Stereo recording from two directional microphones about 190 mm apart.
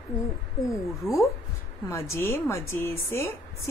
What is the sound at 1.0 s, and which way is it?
Speech, 15° left (ahead or behind).